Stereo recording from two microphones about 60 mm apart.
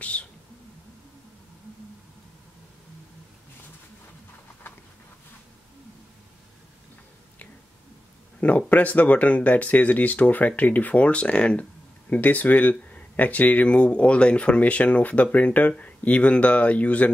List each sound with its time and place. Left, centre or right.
0.0 s speech: left
8.4 s speech: left